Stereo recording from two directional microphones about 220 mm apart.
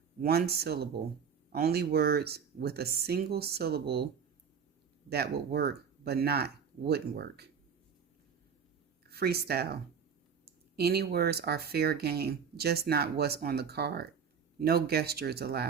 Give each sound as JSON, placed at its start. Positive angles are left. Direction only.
{"t": 0.2, "sound": "speech", "side_deg": -45}
{"t": 9.0, "sound": "speech", "side_deg": -45}
{"t": 10.8, "sound": "speech", "side_deg": -45}